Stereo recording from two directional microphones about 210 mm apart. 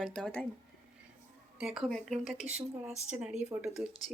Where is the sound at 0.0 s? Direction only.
Centre (ahead or behind).